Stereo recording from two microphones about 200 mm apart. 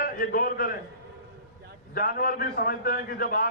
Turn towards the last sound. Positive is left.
turn(degrees=45)  # may be behind; listen again after turning